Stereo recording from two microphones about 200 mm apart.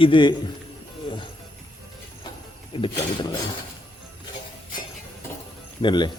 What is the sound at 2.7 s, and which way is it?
Speech, 25° left (ahead or behind).